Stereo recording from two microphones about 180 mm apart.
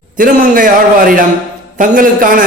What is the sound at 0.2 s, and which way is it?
A man's voice, 50° right (ahead or behind).